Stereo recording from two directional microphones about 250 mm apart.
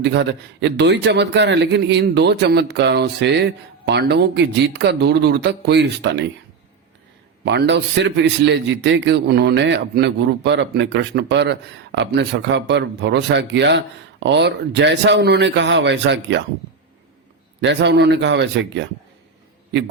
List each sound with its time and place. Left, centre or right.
0.0 s a man's voice: right
7.4 s a man's voice: right
17.6 s a man's voice: right